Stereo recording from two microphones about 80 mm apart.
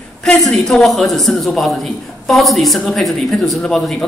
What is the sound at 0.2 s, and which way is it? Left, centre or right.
A woman's voice, centre.